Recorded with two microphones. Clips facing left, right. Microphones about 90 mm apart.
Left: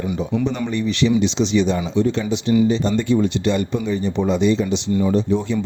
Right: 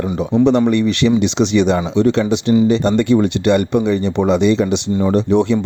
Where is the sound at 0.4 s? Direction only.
70° right (ahead or behind).